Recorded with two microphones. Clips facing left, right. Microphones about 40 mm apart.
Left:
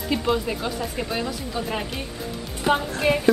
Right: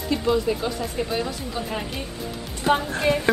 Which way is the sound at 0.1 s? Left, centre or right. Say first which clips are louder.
Right 2 dB; centre.